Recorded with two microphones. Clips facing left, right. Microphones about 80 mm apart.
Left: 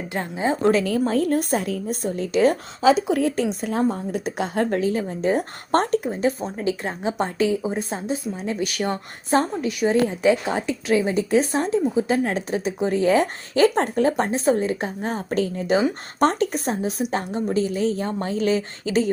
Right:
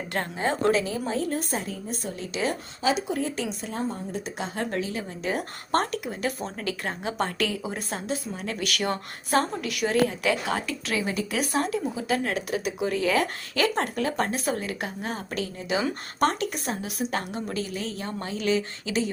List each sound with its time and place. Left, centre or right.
0.1 s a woman's voice: centre
0.7 s a woman's voice: left
3.1 s a woman's voice: left
6.1 s a woman's voice: left
17.0 s a woman's voice: left